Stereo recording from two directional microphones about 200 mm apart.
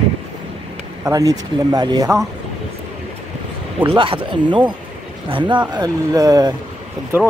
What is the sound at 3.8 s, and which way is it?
A man's voice, 25° right (ahead or behind).